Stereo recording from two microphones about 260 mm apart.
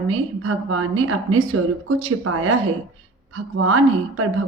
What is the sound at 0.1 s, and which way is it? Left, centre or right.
A woman's voice, right.